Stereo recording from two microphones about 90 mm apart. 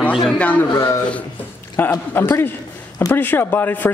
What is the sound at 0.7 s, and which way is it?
Speech, 35° left (ahead or behind).